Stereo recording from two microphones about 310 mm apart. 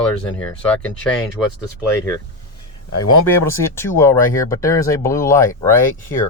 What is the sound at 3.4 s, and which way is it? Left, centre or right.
Speech, centre.